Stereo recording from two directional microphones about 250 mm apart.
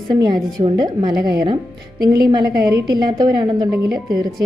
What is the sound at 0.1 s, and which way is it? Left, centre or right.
A woman's voice, centre.